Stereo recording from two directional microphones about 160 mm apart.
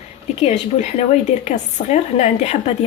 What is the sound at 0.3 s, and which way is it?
Speech, 45° left (ahead or behind).